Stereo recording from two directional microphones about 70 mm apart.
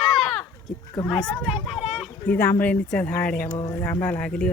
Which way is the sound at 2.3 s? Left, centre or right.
Left.